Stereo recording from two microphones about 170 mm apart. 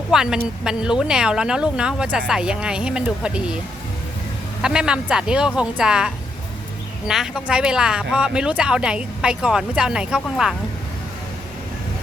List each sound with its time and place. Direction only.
0.1 s a woman's voice: 5° right (ahead or behind)
4.6 s a woman's voice: 5° right (ahead or behind)